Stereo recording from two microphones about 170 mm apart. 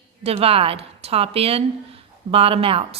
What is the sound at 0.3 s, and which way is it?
A woman's voice, 35° right (ahead or behind).